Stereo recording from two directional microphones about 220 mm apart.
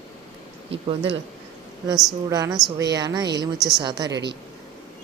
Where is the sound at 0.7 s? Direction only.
25° right (ahead or behind).